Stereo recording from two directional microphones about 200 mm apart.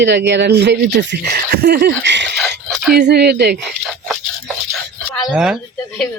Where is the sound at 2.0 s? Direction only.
60° right (ahead or behind).